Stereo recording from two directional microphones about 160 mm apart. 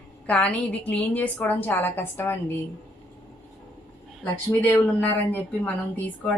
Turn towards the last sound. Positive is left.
turn(degrees=10)  # may be behind; listen again after turning